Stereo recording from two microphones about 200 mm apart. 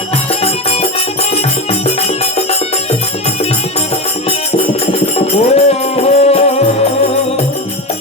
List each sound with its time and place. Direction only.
4.9 s music: 30° left (ahead or behind)